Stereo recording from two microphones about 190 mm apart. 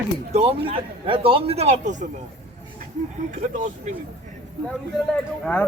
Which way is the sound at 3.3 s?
45° right (ahead or behind).